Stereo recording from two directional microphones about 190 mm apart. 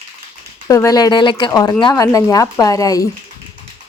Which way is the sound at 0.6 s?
15° left (ahead or behind).